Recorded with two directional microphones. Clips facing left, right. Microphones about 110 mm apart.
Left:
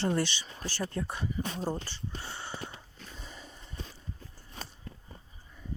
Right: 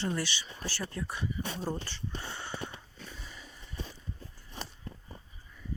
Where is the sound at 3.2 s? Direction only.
30° left (ahead or behind).